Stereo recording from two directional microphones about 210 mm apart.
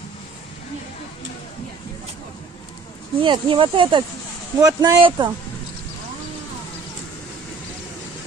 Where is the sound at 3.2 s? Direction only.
25° right (ahead or behind).